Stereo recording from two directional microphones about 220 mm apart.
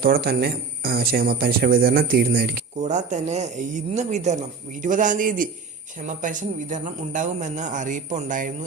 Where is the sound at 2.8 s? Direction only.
30° right (ahead or behind).